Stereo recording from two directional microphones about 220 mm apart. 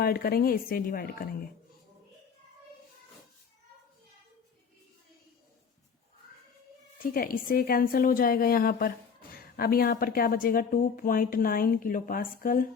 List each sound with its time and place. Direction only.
0.0 s a woman's voice: 40° left (ahead or behind)
7.0 s speech: 40° left (ahead or behind)